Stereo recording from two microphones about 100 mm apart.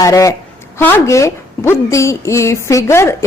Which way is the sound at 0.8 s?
20° left (ahead or behind).